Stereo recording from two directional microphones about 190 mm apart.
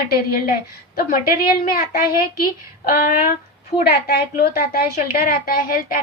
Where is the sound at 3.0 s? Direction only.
50° left (ahead or behind).